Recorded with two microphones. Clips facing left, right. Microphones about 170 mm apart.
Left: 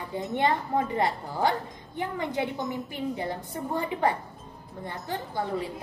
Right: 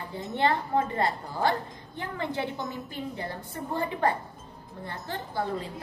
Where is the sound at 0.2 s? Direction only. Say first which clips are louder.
Even; 20° left (ahead or behind).